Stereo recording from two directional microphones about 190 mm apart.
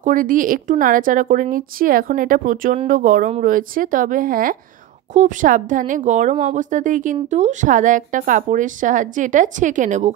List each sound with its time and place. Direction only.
0.0 s a woman's voice: 45° right (ahead or behind)